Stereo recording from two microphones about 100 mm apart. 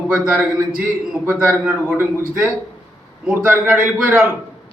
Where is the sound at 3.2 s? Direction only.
20° right (ahead or behind).